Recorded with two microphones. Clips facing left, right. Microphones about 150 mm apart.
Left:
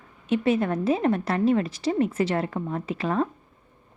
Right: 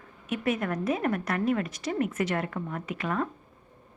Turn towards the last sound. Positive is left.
turn(degrees=30)  # may be behind; listen again after turning